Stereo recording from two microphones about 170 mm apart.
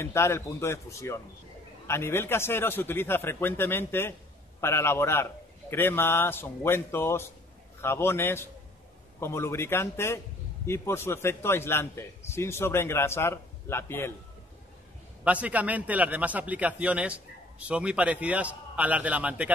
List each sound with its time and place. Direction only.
0.0 s a man's voice: 15° left (ahead or behind)
15.2 s a man's voice: 10° right (ahead or behind)